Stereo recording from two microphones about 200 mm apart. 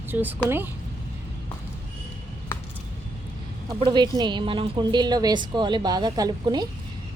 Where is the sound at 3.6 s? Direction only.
20° right (ahead or behind).